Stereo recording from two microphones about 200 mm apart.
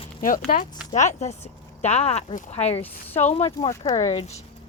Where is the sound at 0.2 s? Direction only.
45° left (ahead or behind); by 3.8 s 30° left (ahead or behind).